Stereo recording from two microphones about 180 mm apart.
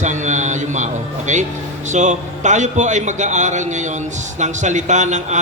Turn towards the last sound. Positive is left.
turn(degrees=-40)  # may be behind; listen again after turning